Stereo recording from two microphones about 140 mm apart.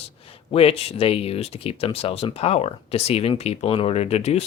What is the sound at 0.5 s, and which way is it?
Speech, 45° left (ahead or behind).